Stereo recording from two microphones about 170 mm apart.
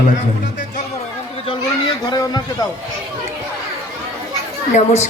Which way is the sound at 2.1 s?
25° left (ahead or behind).